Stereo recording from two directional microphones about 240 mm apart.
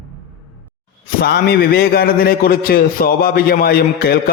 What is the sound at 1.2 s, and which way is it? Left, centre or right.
A man's voice, left.